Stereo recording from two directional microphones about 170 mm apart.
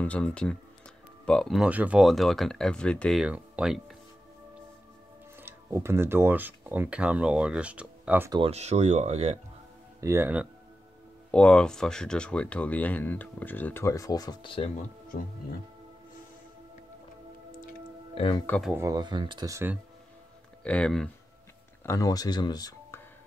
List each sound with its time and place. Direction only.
0.0 s speech: 5° left (ahead or behind)
5.4 s speech: 15° right (ahead or behind)
8.5 s speech: 40° right (ahead or behind)
9.9 s speech: 15° right (ahead or behind)
11.3 s speech: 5° left (ahead or behind); by 14.7 s 30° left (ahead or behind)
18.1 s speech: 35° left (ahead or behind)
18.8 s speech: 20° right (ahead or behind)
20.6 s speech: 5° left (ahead or behind)
21.8 s speech: 20° left (ahead or behind)